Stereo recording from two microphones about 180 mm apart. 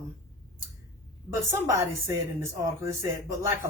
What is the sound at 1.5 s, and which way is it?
A woman's voice, 15° right (ahead or behind).